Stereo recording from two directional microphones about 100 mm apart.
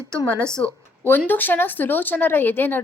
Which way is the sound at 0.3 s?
10° left (ahead or behind).